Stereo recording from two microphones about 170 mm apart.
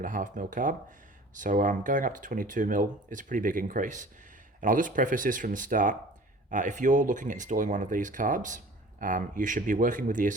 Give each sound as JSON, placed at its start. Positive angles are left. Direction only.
{"t": 0.0, "sound": "speech", "side_deg": -50}